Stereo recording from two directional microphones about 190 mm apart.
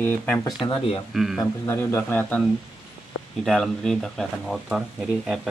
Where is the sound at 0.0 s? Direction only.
10° left (ahead or behind).